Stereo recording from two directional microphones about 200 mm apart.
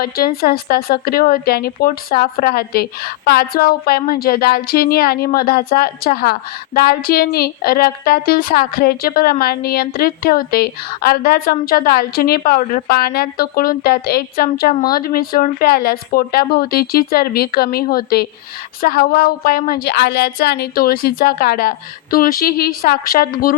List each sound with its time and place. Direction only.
0.0 s a woman's voice: 50° left (ahead or behind)